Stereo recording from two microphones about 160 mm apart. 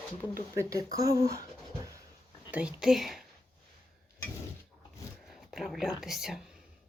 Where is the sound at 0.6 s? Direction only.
20° right (ahead or behind).